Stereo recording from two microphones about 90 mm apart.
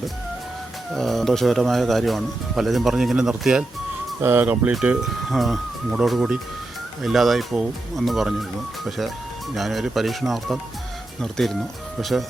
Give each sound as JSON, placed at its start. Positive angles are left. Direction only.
{"t": 0.9, "sound": "speech", "side_deg": 0}
{"t": 4.2, "sound": "speech", "side_deg": -25}
{"t": 4.7, "sound": "speech", "side_deg": -5}